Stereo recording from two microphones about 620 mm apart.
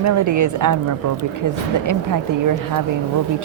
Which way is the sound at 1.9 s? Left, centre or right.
Right.